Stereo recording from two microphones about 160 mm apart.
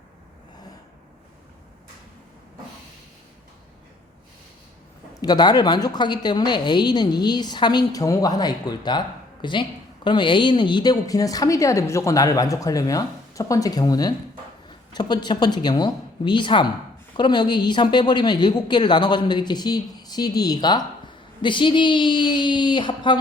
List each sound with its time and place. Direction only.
5.2 s a woman's voice: 25° left (ahead or behind)